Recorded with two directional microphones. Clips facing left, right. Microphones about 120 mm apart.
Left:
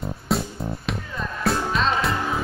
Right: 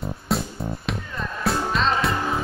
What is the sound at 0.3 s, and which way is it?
Music, centre (ahead or behind).